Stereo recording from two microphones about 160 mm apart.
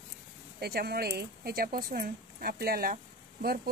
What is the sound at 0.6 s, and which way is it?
Speech, 75° right (ahead or behind).